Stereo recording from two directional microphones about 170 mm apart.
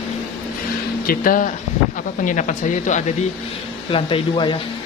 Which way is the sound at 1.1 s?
55° left (ahead or behind).